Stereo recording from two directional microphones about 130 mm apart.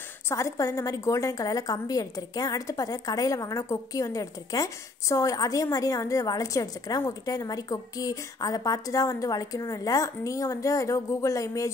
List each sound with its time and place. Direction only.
0.3 s a woman's voice: 25° left (ahead or behind)